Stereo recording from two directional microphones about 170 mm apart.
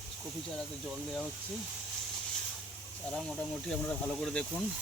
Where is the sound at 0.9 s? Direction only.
Centre (ahead or behind).